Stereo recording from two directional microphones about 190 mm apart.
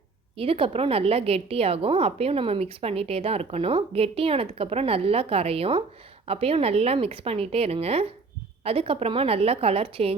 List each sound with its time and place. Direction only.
0.3 s a woman's voice: 30° right (ahead or behind)